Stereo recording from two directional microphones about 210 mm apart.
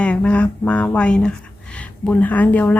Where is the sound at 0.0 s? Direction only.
5° left (ahead or behind).